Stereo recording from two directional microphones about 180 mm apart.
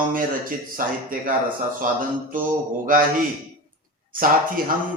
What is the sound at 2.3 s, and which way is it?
Speech, 50° right (ahead or behind).